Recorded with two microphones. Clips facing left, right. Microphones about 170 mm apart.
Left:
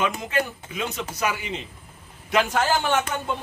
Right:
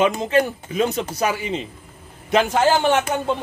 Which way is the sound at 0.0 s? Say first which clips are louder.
Right 7 dB; 30° right (ahead or behind).